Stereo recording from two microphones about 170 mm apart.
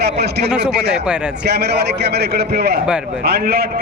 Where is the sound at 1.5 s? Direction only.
75° right (ahead or behind).